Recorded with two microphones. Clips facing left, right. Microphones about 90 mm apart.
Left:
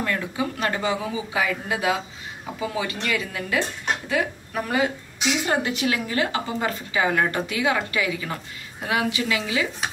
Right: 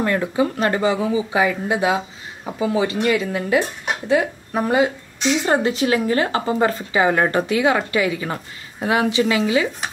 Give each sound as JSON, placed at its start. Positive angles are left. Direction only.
{"t": 0.0, "sound": "speech", "side_deg": -35}